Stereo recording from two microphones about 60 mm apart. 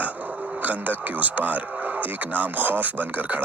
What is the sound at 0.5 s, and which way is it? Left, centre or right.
Speech, right.